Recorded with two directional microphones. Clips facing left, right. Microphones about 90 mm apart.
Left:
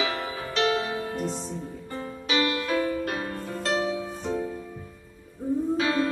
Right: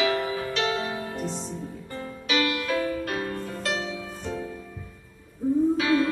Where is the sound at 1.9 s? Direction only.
25° left (ahead or behind).